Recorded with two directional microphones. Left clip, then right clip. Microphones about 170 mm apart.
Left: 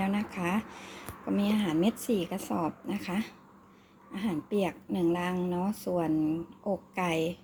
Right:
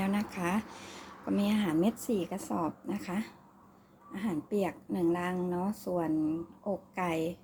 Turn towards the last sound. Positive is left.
turn(degrees=15)  # may be behind; listen again after turning